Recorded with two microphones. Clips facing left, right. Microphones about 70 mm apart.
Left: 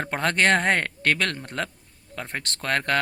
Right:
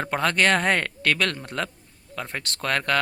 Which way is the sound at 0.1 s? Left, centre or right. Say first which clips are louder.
Even; left.